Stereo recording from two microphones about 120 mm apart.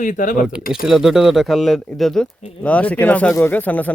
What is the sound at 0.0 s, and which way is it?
Speech, 90° left.